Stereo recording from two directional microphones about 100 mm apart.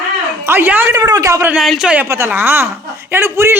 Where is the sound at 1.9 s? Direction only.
20° right (ahead or behind).